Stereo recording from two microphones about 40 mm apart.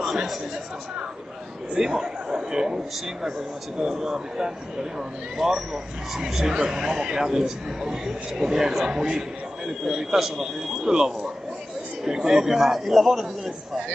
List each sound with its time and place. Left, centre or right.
0.0 s chatter: centre
1.8 s speech: centre
5.4 s speech: centre
6.1 s speech: centre